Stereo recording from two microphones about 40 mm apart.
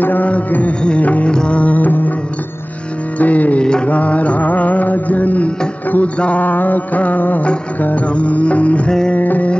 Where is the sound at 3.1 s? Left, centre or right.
Left.